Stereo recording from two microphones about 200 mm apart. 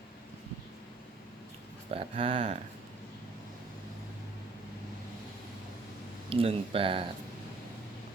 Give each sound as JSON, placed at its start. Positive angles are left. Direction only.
{"t": 1.9, "sound": "speech", "side_deg": -30}
{"t": 6.3, "sound": "speech", "side_deg": -30}